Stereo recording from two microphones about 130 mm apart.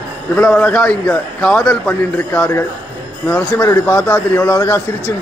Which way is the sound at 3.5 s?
20° left (ahead or behind).